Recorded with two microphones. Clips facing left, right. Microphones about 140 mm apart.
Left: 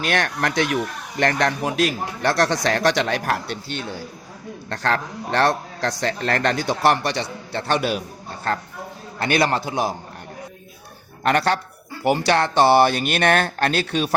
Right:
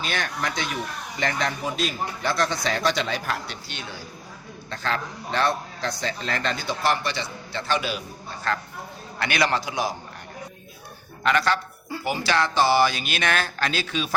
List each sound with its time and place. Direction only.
0.0 s speech: 70° left (ahead or behind)
1.2 s a man's voice: 60° left (ahead or behind)
5.3 s a man's voice: 70° left (ahead or behind)
8.5 s a man's voice: 45° left (ahead or behind)
11.2 s speech: 40° left (ahead or behind)
12.0 s a man's voice: 60° left (ahead or behind)